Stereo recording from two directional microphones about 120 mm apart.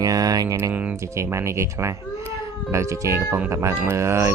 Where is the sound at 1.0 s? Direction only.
25° right (ahead or behind).